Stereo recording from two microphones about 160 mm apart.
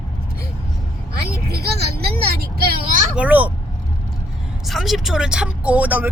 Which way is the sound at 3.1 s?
10° right (ahead or behind).